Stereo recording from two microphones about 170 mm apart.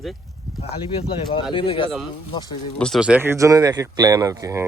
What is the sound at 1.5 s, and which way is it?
Speech, 30° left (ahead or behind).